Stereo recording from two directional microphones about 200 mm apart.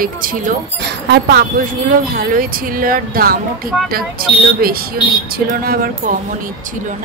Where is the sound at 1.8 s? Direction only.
45° right (ahead or behind).